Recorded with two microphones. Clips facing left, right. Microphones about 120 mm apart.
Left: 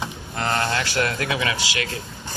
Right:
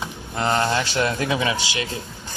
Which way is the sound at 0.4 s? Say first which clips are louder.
Right 3 dB; 20° right (ahead or behind).